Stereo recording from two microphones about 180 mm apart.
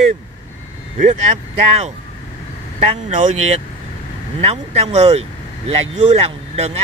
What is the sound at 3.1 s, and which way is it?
Speech, 40° right (ahead or behind).